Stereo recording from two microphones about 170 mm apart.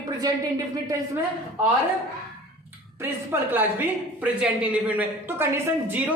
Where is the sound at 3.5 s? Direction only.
10° right (ahead or behind).